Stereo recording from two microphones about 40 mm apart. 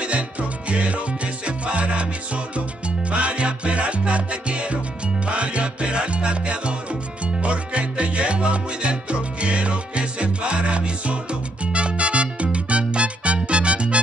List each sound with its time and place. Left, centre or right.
0.0 s music: right